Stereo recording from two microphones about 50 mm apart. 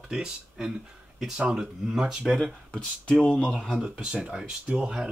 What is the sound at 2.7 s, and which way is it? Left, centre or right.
Speech, centre.